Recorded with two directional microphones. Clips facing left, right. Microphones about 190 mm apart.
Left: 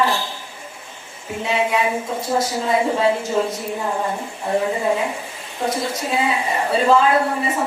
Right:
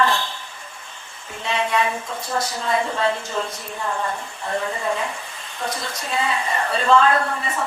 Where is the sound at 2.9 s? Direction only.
10° left (ahead or behind).